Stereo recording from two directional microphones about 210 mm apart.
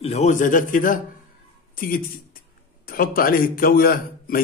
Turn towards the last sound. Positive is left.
turn(degrees=45)  # may be behind; listen again after turning